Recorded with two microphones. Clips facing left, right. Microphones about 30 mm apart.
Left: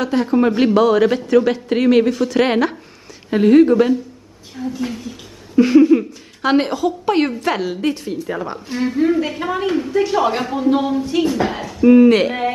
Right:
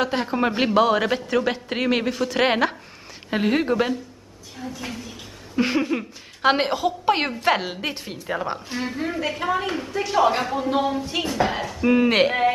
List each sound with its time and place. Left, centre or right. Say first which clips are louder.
0.0 s a woman's voice: left 6 dB; centre
5.6 s speech: left 11 dB; centre
8.5 s a woman's voice: left 9 dB; centre